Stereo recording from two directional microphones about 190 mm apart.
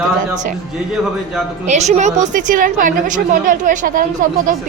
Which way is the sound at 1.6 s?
35° right (ahead or behind).